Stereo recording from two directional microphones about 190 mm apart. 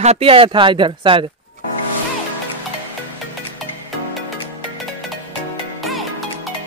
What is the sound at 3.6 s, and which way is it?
Music, centre (ahead or behind).